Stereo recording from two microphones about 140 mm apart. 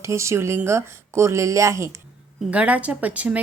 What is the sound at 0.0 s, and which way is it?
Speech, 20° right (ahead or behind).